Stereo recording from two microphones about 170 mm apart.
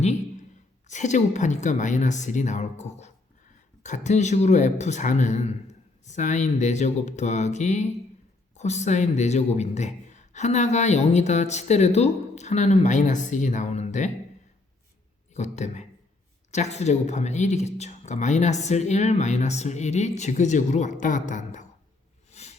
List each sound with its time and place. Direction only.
0.9 s speech: 45° left (ahead or behind)
15.3 s speech: 45° left (ahead or behind)
22.3 s a sound: 40° left (ahead or behind)